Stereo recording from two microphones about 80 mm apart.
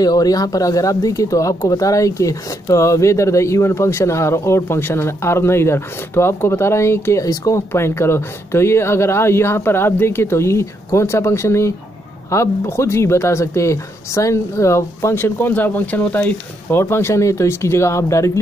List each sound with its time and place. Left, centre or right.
0.0 s speech: left
16.8 s speech: left